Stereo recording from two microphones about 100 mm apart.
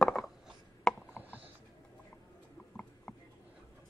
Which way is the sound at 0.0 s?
5° left (ahead or behind).